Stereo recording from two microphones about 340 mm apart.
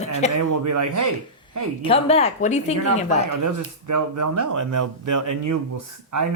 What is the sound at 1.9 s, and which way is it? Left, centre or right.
A woman's voice, centre.